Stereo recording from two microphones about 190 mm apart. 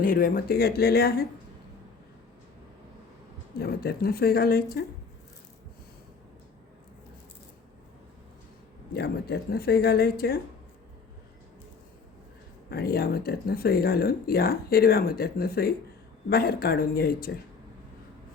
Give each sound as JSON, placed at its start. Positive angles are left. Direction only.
{"t": 0.0, "sound": "speech", "side_deg": 50}
{"t": 3.6, "sound": "speech", "side_deg": 55}
{"t": 9.0, "sound": "speech", "side_deg": 55}
{"t": 12.7, "sound": "speech", "side_deg": 55}